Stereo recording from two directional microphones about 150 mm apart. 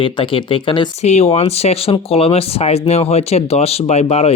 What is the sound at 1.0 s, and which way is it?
Speech, 45° left (ahead or behind).